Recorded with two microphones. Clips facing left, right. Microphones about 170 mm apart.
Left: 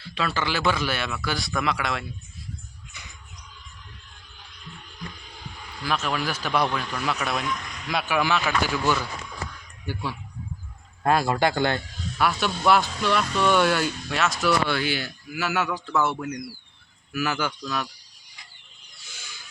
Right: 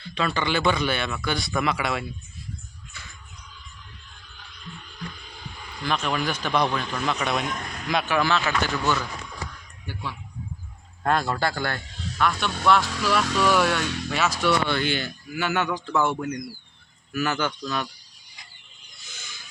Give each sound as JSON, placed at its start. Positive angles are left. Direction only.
{"t": 0.0, "sound": "speech", "side_deg": 5}
{"t": 2.9, "sound": "music", "side_deg": 15}
{"t": 5.8, "sound": "speech", "side_deg": 5}
{"t": 7.4, "sound": "a sound", "side_deg": -50}
{"t": 7.9, "sound": "speech", "side_deg": 5}
{"t": 12.2, "sound": "speech", "side_deg": 5}
{"t": 19.0, "sound": "a sound", "side_deg": 10}